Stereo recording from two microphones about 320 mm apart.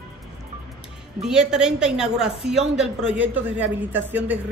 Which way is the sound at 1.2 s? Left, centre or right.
Centre.